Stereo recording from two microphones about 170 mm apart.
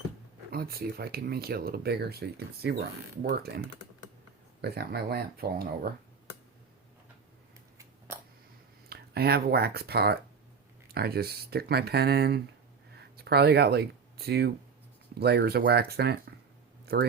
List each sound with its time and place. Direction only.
0.5 s speech: 65° right (ahead or behind)
4.6 s speech: 65° right (ahead or behind)
7.8 s a sound: 15° right (ahead or behind)
8.9 s speech: 65° right (ahead or behind)